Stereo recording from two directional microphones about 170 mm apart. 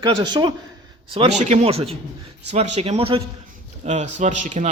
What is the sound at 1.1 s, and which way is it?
Speech, 40° right (ahead or behind).